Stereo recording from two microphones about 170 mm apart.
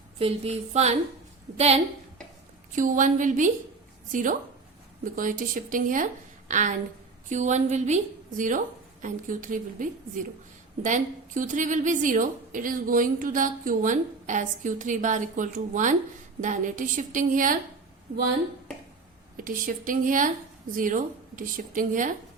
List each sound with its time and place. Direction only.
0.2 s a woman's voice: 35° right (ahead or behind)
2.7 s a woman's voice: 50° right (ahead or behind)
19.5 s a woman's voice: 55° right (ahead or behind)